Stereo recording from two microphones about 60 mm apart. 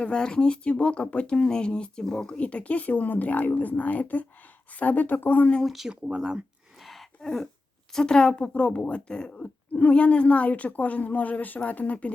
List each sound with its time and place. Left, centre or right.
0.0 s speech: centre; by 5.5 s left
5.6 s speech: centre
6.8 s a sound: centre
7.9 s speech: centre